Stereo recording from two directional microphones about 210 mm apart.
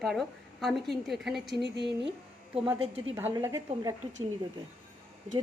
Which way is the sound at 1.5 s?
55° right (ahead or behind).